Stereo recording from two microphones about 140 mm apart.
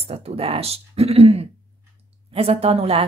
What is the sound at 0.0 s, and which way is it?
Speech, 45° right (ahead or behind).